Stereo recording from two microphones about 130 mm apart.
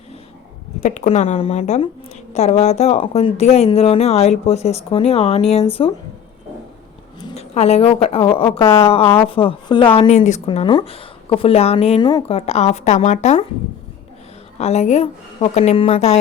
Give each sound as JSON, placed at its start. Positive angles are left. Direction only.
{"t": 0.8, "sound": "a woman's voice", "side_deg": 70}
{"t": 7.3, "sound": "a woman's voice", "side_deg": 55}
{"t": 10.4, "sound": "a woman's voice", "side_deg": 40}
{"t": 11.9, "sound": "a woman's voice", "side_deg": 35}
{"t": 12.3, "sound": "a woman's voice", "side_deg": 50}
{"t": 14.6, "sound": "a woman's voice", "side_deg": 55}